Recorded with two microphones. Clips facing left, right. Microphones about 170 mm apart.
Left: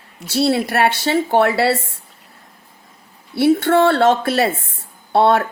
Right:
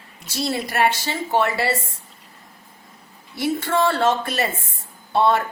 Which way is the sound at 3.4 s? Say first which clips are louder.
Left 7 dB; 70° left (ahead or behind).